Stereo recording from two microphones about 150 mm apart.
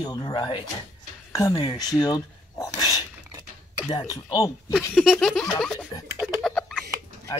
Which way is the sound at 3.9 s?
25° left (ahead or behind).